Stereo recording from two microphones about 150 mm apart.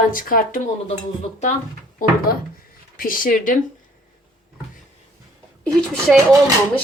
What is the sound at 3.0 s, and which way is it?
Speech, 70° left (ahead or behind).